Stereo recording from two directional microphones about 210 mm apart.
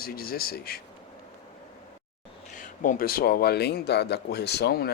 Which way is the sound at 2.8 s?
40° left (ahead or behind).